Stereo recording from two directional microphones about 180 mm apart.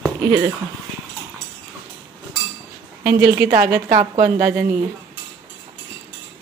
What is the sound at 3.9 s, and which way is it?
Speech, 45° right (ahead or behind).